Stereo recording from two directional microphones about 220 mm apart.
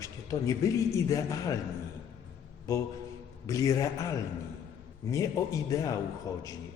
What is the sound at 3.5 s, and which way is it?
Speech, 15° left (ahead or behind).